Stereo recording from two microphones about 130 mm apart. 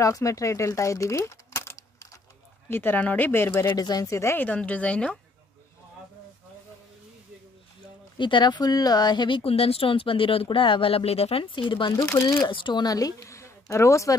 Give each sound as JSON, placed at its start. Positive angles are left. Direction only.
{"t": 0.0, "sound": "a woman's voice", "side_deg": 25}
{"t": 8.2, "sound": "speech", "side_deg": 35}
{"t": 12.1, "sound": "speech", "side_deg": 20}
{"t": 12.4, "sound": "speech", "side_deg": 35}